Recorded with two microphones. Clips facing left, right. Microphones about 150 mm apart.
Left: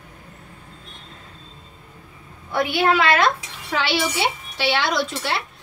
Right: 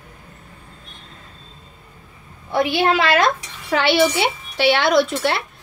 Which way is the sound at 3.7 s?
60° right (ahead or behind).